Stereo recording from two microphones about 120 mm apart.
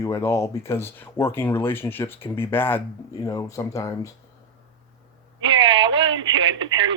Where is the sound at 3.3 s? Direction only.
25° left (ahead or behind).